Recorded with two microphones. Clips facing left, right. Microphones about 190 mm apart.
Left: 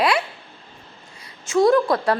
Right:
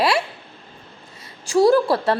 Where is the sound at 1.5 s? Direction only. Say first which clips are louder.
Right 1 dB; 35° right (ahead or behind).